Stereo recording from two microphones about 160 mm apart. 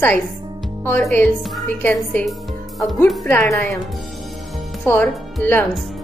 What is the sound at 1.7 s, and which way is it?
Speech, 10° left (ahead or behind).